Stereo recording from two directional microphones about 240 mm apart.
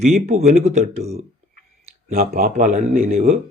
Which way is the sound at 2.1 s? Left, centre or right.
Right.